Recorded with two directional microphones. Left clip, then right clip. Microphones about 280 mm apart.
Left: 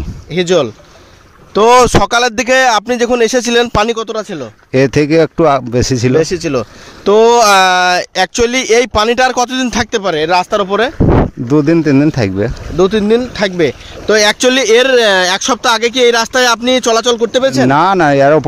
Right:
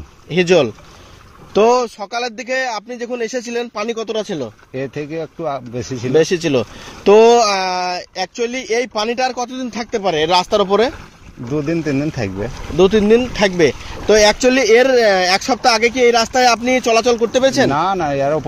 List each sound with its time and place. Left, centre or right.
0.4 s speech: centre
1.5 s speech: left
6.1 s speech: centre
7.3 s speech: left
11.5 s speech: left